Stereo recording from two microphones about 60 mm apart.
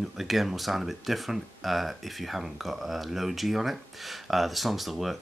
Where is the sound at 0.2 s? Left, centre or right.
Centre.